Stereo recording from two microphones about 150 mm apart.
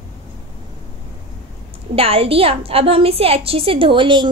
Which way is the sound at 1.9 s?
40° right (ahead or behind).